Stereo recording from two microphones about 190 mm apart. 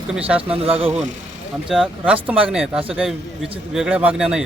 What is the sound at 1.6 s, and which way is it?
Speech, 5° right (ahead or behind).